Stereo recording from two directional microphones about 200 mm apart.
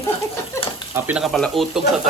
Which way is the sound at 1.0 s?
5° right (ahead or behind).